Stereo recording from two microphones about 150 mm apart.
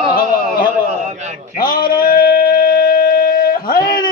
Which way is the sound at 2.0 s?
85° left.